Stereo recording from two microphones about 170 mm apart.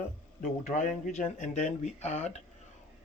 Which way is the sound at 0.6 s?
50° left (ahead or behind).